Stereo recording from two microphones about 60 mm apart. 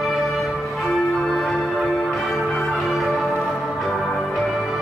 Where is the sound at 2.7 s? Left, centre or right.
Centre.